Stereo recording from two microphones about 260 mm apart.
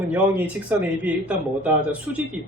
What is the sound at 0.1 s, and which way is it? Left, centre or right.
Speech, centre.